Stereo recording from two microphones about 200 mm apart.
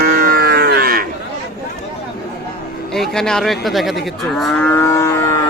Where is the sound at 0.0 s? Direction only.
50° right (ahead or behind).